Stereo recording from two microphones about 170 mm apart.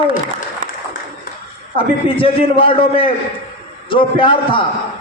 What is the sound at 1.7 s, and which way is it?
A man's voice, 30° left (ahead or behind).